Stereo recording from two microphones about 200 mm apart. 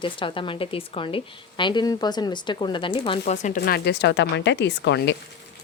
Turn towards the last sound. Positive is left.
turn(degrees=60)  # may be behind; listen again after turning